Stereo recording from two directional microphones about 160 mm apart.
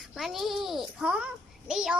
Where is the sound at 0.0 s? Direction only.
Centre (ahead or behind).